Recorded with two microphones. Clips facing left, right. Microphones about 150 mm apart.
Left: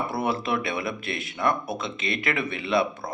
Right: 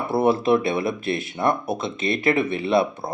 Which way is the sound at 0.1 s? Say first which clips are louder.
Right 8 dB; 25° right (ahead or behind).